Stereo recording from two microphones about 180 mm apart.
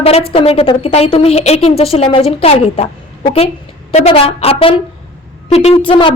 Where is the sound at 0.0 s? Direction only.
35° left (ahead or behind).